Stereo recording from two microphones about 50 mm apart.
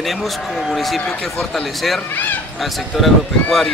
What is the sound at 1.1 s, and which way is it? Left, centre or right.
Speech, centre.